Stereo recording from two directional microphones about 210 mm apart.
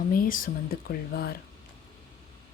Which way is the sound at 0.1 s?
40° left (ahead or behind).